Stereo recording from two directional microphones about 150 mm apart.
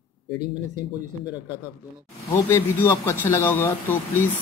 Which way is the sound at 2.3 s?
20° left (ahead or behind).